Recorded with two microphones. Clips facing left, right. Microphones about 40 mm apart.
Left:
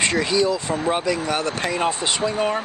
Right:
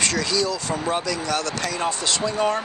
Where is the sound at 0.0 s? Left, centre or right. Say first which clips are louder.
Left 3 dB; left.